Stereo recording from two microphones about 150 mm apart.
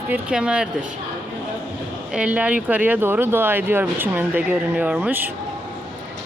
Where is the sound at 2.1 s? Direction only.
10° right (ahead or behind).